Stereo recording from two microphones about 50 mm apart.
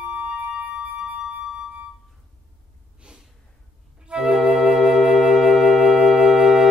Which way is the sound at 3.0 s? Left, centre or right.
Right.